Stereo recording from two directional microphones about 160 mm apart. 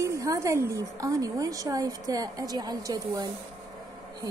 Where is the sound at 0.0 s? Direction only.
20° right (ahead or behind).